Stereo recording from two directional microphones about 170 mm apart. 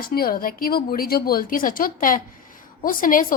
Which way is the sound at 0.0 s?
60° left (ahead or behind).